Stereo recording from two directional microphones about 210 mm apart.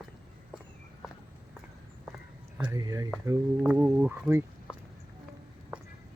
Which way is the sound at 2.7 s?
15° right (ahead or behind).